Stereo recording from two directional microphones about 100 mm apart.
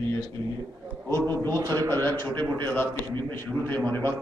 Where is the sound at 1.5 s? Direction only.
40° right (ahead or behind).